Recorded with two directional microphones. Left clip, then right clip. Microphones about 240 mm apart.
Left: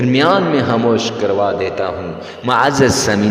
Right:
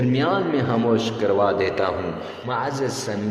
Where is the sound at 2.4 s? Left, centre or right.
Left.